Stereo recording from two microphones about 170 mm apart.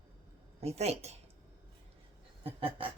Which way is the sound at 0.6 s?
40° right (ahead or behind).